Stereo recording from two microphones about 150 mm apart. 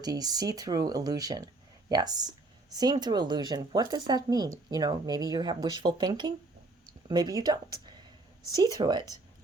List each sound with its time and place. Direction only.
0.0 s speech: 25° right (ahead or behind)